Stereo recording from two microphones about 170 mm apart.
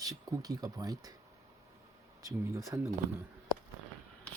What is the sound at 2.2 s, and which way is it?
Speech, 15° right (ahead or behind).